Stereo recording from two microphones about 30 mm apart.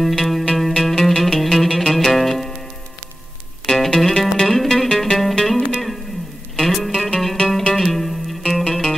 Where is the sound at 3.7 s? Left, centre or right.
Centre.